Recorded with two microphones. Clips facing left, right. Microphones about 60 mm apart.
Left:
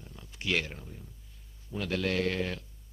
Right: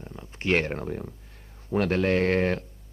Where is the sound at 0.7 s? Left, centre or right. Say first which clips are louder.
Right 15 dB; right.